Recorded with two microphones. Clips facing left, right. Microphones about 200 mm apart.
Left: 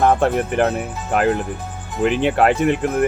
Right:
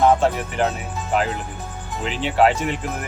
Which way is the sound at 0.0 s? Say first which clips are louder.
Left 1 dB; 55° left (ahead or behind).